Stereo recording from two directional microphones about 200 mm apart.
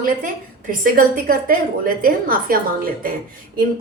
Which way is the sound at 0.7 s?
45° right (ahead or behind).